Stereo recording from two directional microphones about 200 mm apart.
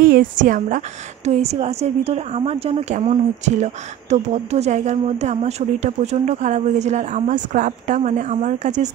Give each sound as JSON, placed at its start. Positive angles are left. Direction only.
{"t": 0.0, "sound": "a woman's voice", "side_deg": -45}